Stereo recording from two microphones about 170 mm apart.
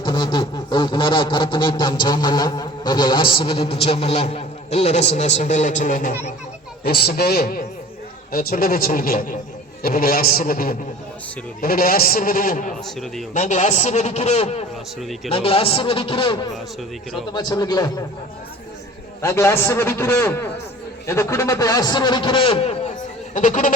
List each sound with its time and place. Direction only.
0.0 s a sound: 30° left (ahead or behind); by 6.1 s 50° left (ahead or behind)
6.8 s a man's voice: 70° left (ahead or behind); by 12.7 s 55° left (ahead or behind)
12.8 s a man's voice: centre (ahead or behind)
13.3 s a man's voice: 45° left (ahead or behind)
15.0 s a man's voice: centre (ahead or behind)
15.3 s a man's voice: 35° left (ahead or behind)
17.3 s a sound: 25° left (ahead or behind)
19.2 s a man's voice: 15° left (ahead or behind)
21.1 s a sound: 15° left (ahead or behind); by 22.8 s 35° left (ahead or behind)
23.3 s a man's voice: 50° left (ahead or behind)